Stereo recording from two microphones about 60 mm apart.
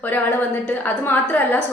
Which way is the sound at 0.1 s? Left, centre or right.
Left.